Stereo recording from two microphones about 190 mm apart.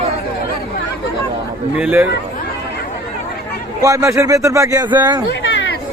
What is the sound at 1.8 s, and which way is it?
Speech, 10° right (ahead or behind).